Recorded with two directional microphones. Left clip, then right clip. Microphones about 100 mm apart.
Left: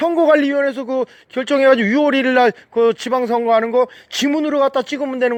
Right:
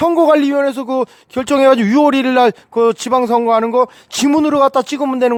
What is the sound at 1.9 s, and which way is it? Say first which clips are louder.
A man's voice: right 3 dB; 55° right (ahead or behind).